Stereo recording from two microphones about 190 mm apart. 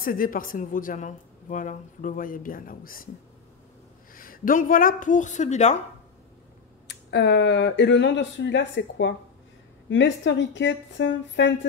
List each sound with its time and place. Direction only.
0.0 s a woman's voice: 45° left (ahead or behind)
4.1 s a woman's voice: 50° left (ahead or behind)
6.9 s speech: 65° left (ahead or behind)